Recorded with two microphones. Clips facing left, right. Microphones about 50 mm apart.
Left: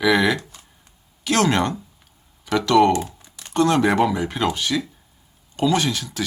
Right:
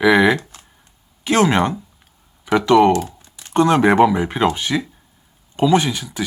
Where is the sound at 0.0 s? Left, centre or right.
Right.